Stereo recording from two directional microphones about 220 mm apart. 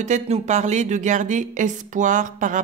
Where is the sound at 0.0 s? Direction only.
30° right (ahead or behind).